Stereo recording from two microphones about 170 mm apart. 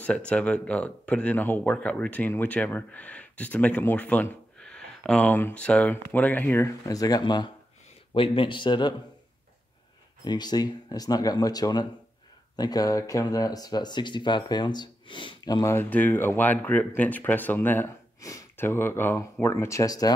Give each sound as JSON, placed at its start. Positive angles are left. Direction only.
{"t": 0.0, "sound": "speech", "side_deg": 5}
{"t": 10.2, "sound": "speech", "side_deg": 25}